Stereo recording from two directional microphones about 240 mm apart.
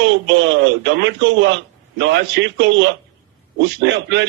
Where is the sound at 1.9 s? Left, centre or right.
Right.